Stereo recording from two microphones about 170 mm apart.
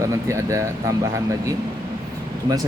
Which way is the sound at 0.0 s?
20° right (ahead or behind).